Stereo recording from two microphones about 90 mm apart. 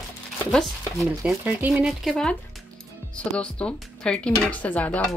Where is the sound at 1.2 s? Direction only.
15° right (ahead or behind).